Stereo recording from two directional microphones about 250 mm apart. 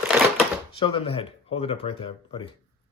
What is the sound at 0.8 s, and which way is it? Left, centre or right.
Speech, left.